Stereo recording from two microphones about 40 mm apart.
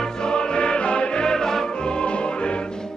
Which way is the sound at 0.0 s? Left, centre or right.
Centre.